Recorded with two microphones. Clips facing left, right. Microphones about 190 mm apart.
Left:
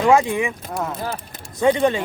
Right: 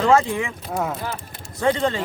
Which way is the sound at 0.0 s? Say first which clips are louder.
Left 2 dB; 15° left (ahead or behind).